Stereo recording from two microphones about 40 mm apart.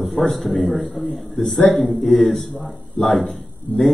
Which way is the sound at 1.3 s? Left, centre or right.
Centre.